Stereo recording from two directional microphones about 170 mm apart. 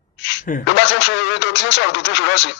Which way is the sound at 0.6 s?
90° left.